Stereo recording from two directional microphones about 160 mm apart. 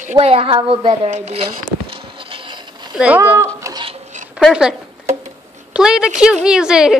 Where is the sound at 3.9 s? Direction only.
45° right (ahead or behind).